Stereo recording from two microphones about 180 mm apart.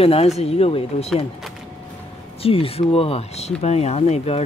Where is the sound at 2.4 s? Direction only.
30° left (ahead or behind).